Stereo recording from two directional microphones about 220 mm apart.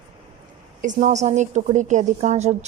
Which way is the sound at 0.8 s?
35° right (ahead or behind).